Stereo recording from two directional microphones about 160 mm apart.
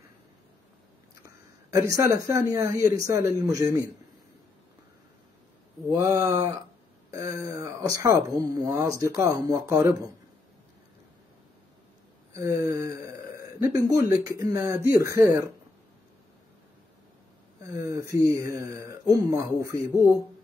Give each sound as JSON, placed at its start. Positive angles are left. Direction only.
{"t": 1.2, "sound": "speech", "side_deg": -20}
{"t": 5.9, "sound": "speech", "side_deg": -20}
{"t": 12.4, "sound": "a sound", "side_deg": -20}
{"t": 13.8, "sound": "speech", "side_deg": -20}
{"t": 17.6, "sound": "speech", "side_deg": -20}